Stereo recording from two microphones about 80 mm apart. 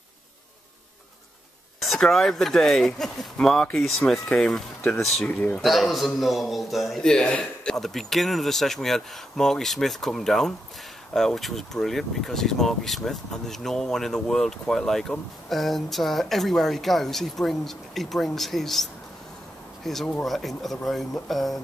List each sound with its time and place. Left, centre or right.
1.8 s speech: centre
5.2 s speech: centre
5.6 s speech: centre